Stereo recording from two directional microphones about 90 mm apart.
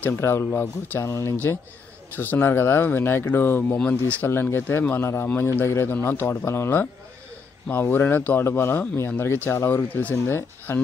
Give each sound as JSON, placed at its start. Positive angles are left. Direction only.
{"t": 0.0, "sound": "speech", "side_deg": 25}
{"t": 4.3, "sound": "speech", "side_deg": 25}